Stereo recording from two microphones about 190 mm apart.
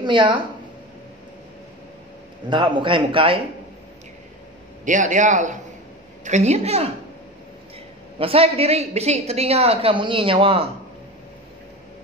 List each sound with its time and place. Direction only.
0.0 s speech: 25° right (ahead or behind)
2.5 s speech: 25° right (ahead or behind)
4.8 s a woman's voice: 40° right (ahead or behind)
8.2 s a woman's voice: 30° right (ahead or behind)